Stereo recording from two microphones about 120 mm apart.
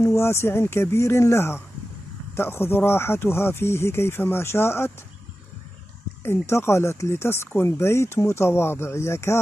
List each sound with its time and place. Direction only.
0.0 s speech: 20° left (ahead or behind)
6.5 s speech: 20° left (ahead or behind)